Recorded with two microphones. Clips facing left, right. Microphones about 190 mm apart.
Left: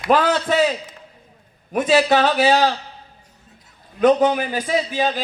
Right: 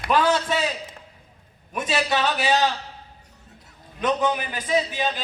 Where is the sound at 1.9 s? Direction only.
45° left (ahead or behind).